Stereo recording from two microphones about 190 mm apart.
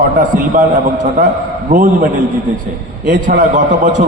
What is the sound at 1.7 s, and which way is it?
Speech, 45° right (ahead or behind).